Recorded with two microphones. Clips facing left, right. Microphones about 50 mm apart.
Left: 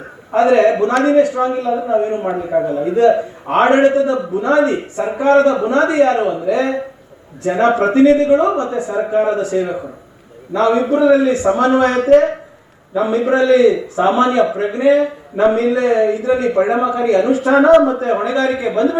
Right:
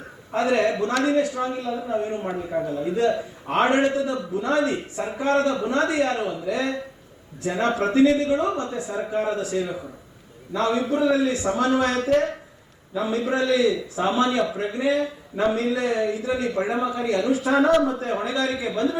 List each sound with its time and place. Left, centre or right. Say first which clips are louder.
0.3 s a man's voice: left 10 dB; centre
2.2 s a man's voice: left 9 dB; left
2.6 s a man's voice: left 10 dB; centre